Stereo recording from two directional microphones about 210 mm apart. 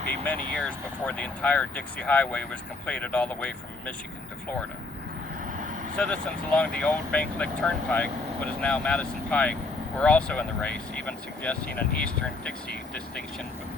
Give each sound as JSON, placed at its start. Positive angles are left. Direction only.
{"t": 0.3, "sound": "speech", "side_deg": 5}
{"t": 5.5, "sound": "vehicle", "side_deg": -40}
{"t": 6.0, "sound": "speech", "side_deg": 5}